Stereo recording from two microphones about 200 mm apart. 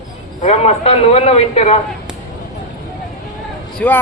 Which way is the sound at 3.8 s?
5° left (ahead or behind).